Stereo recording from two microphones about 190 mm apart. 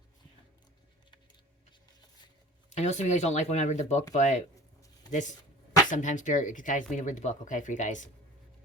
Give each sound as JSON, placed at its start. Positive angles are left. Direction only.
{"t": 2.6, "sound": "speech", "side_deg": 40}
{"t": 5.9, "sound": "speech", "side_deg": 40}